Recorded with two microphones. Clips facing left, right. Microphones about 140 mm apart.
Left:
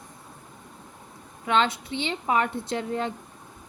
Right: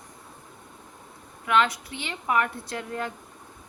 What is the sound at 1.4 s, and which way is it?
Speech, 25° left (ahead or behind).